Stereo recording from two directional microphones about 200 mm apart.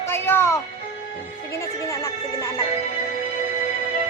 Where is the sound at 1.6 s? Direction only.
15° left (ahead or behind).